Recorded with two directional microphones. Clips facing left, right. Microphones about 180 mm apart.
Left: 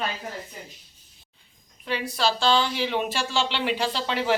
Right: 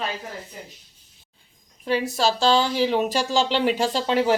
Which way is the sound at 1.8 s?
45° right (ahead or behind).